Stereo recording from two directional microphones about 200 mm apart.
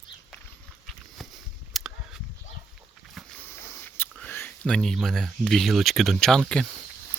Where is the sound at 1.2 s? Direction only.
Centre (ahead or behind).